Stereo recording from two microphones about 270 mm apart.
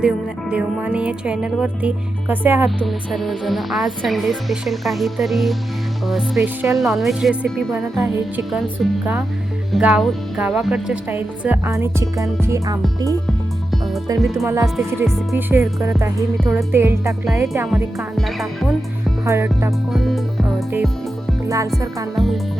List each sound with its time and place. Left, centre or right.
0.5 s speech: centre
14.2 s speech: centre
19.2 s speech: centre
21.4 s speech: centre
22.1 s speech: centre